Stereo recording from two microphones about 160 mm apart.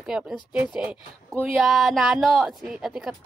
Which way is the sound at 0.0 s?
5° right (ahead or behind).